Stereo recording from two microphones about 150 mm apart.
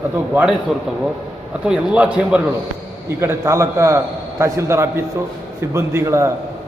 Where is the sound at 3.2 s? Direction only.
20° right (ahead or behind).